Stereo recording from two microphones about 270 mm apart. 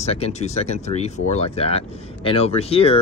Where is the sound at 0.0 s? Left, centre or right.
Left.